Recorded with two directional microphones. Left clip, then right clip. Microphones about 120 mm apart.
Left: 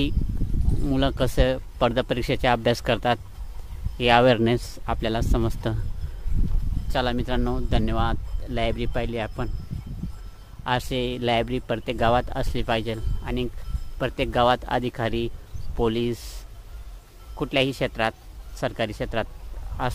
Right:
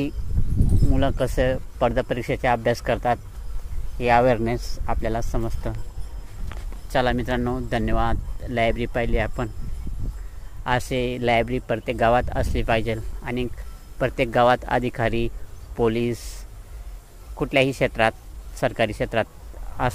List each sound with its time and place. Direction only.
0.9 s speech: 40° left (ahead or behind)
4.6 s speech: 90° left
4.8 s speech: 40° left (ahead or behind)
5.4 s speech: 55° left (ahead or behind)
6.9 s speech: centre (ahead or behind)
10.6 s speech: 10° left (ahead or behind)
17.4 s speech: 10° left (ahead or behind)